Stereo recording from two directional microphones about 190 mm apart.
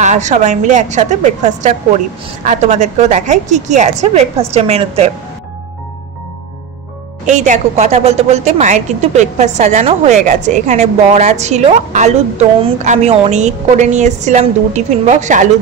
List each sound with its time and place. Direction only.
0.0 s a woman's voice: 40° right (ahead or behind)
7.2 s a woman's voice: 40° right (ahead or behind)